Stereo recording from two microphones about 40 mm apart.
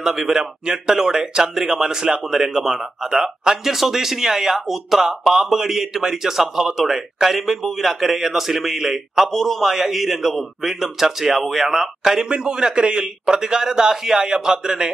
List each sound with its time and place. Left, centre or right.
0.0 s a man's voice: centre
12.3 s a man's voice: centre